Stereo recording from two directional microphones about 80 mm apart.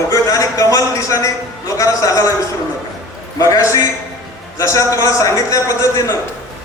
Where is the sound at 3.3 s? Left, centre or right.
Left.